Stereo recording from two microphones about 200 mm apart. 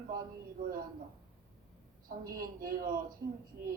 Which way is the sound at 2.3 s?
45° right (ahead or behind).